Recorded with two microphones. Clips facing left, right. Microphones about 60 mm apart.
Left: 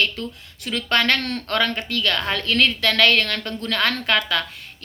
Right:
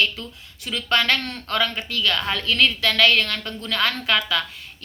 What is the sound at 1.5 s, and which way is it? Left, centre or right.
A woman's voice, left.